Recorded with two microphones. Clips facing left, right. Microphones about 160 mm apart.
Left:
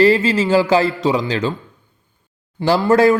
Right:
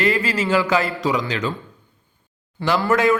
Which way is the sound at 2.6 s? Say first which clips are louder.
Left 5 dB; 30° left (ahead or behind).